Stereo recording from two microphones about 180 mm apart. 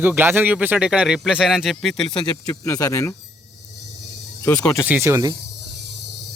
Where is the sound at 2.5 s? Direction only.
20° left (ahead or behind).